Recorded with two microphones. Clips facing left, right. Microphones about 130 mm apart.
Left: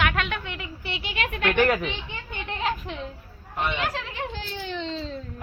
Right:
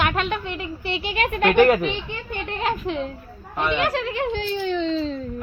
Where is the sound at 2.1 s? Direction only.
50° right (ahead or behind).